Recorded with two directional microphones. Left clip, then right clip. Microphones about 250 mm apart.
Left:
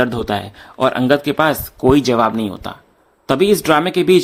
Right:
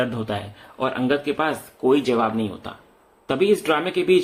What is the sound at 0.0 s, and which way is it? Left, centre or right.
Speech, left.